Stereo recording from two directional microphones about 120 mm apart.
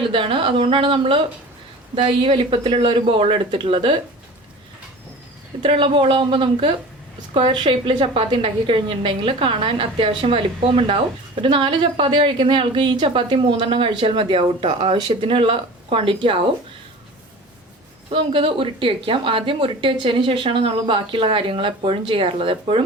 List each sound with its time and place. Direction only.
0.0 s a woman's voice: 45° right (ahead or behind)
5.6 s a woman's voice: 45° right (ahead or behind)
18.1 s a woman's voice: 45° right (ahead or behind)